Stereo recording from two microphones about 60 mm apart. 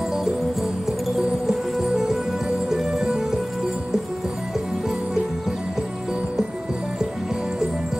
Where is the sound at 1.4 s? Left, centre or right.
Centre.